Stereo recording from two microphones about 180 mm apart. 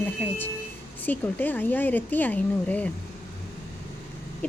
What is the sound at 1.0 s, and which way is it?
Speech, 10° left (ahead or behind).